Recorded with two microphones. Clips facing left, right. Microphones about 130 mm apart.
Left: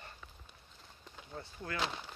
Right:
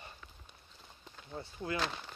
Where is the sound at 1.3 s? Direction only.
15° right (ahead or behind).